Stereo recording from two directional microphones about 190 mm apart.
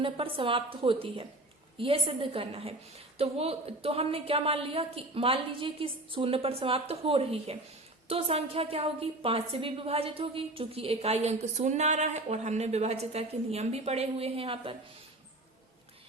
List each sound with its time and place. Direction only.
0.0 s a woman's voice: 30° right (ahead or behind)